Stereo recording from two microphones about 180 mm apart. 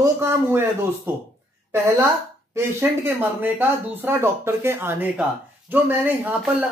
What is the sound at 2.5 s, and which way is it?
Speech, 15° right (ahead or behind).